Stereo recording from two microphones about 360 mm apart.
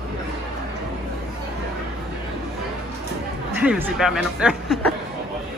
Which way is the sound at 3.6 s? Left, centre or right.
Centre.